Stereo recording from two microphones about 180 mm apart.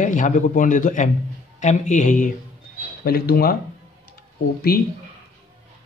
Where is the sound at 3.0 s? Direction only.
60° left (ahead or behind).